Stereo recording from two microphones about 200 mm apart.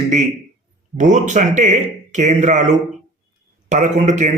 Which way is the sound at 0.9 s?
40° right (ahead or behind).